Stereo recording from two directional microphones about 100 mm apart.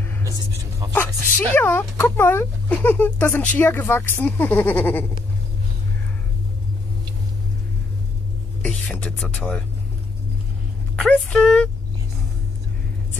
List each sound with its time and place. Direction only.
0.9 s speech: 20° left (ahead or behind)
9.2 s speech: 5° left (ahead or behind)
11.0 s speech: 10° left (ahead or behind)